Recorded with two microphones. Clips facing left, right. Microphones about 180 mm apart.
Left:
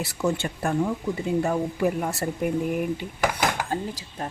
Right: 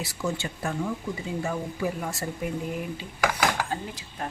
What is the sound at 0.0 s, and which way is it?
Speech, 60° left (ahead or behind).